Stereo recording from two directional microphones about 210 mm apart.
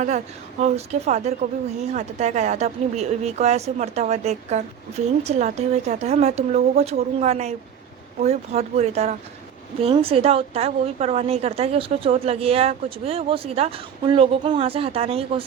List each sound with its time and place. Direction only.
0.6 s a woman's voice: 30° right (ahead or behind)